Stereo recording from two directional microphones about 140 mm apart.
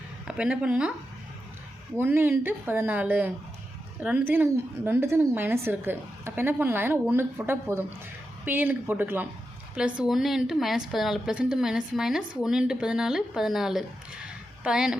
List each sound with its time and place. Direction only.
0.3 s a woman's voice: 10° right (ahead or behind)
2.0 s a woman's voice: 15° right (ahead or behind)
14.3 s a sound: 5° right (ahead or behind)